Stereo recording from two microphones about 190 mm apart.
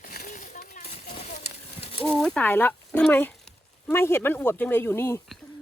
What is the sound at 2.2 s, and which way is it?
Speech, 5° left (ahead or behind).